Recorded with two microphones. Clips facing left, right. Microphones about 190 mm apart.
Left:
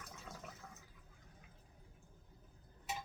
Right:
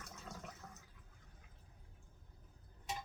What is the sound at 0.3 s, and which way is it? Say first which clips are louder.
Water: right 2 dB; centre (ahead or behind).